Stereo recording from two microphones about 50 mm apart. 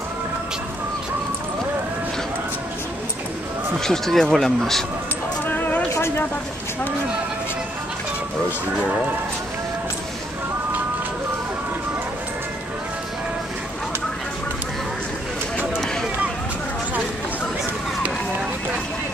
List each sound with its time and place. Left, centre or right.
3.8 s speech: centre
5.5 s music: left
5.9 s a sound: left